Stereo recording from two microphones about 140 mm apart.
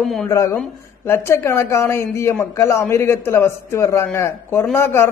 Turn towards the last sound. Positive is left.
turn(degrees=15)  # may be behind; listen again after turning